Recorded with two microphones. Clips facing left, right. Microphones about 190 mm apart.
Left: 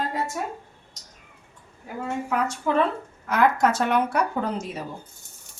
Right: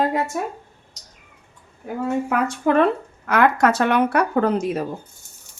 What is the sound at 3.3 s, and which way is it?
Speech, 70° right (ahead or behind).